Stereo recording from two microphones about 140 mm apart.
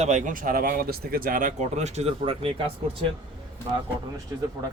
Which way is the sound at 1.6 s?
50° right (ahead or behind).